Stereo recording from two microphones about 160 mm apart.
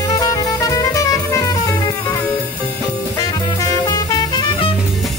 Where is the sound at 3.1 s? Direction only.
20° left (ahead or behind).